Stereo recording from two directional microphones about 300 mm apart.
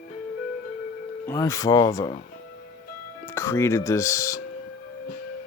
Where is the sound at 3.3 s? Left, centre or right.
Centre.